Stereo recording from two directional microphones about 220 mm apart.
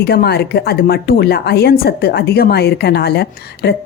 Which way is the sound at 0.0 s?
45° left (ahead or behind).